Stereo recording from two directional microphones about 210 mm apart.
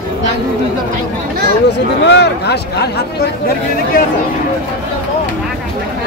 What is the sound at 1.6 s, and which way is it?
Speech, 55° left (ahead or behind).